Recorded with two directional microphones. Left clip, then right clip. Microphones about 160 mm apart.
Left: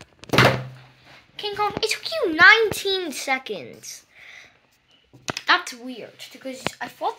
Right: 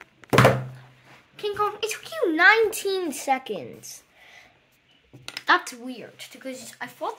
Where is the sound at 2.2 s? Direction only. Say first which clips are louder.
Left 4 dB; 15° left (ahead or behind).